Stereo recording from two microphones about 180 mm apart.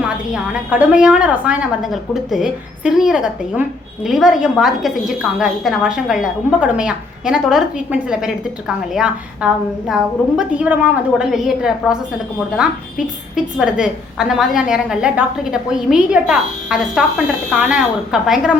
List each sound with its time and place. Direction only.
0.0 s a woman's voice: 10° right (ahead or behind)